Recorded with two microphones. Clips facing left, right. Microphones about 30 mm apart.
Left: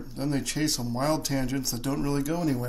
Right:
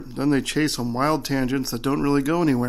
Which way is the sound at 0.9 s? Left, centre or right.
Right.